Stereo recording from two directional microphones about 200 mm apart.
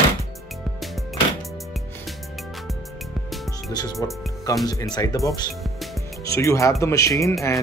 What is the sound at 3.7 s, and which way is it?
Music, 20° left (ahead or behind).